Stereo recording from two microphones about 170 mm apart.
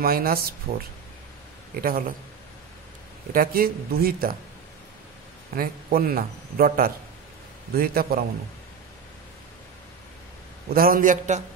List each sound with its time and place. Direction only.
0.0 s a man's voice: 60° right (ahead or behind)
1.8 s a man's voice: 55° right (ahead or behind)
3.3 s a man's voice: 60° right (ahead or behind)
5.6 s a man's voice: 60° right (ahead or behind)
10.7 s a man's voice: 60° right (ahead or behind)